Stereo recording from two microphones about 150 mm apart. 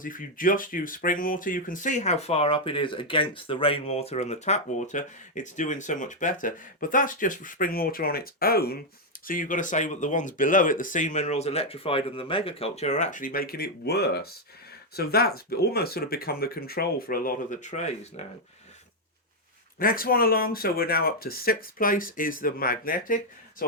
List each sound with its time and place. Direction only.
0.0 s speech: 65° left (ahead or behind); by 8.8 s 90° left
9.2 s speech: 65° left (ahead or behind)
19.8 s speech: 75° left (ahead or behind)